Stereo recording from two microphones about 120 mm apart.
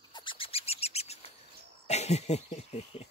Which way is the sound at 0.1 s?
40° left (ahead or behind).